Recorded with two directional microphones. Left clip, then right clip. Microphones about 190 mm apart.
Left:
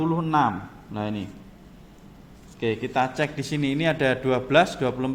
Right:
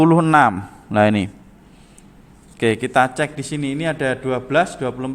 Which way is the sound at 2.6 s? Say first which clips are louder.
Right 8 dB; 45° right (ahead or behind).